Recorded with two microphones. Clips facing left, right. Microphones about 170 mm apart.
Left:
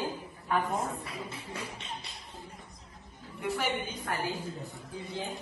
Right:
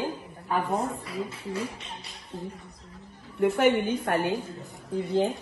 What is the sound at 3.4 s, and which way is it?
A woman's voice, 60° right (ahead or behind).